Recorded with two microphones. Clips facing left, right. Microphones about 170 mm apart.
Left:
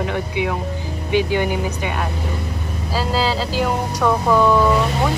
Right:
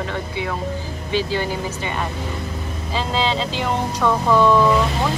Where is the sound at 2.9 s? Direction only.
5° left (ahead or behind).